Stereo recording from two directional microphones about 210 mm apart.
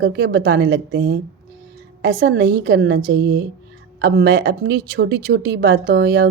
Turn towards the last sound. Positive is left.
turn(degrees=-50)  # may be behind; listen again after turning